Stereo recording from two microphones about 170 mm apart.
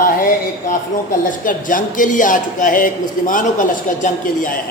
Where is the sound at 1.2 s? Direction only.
50° left (ahead or behind).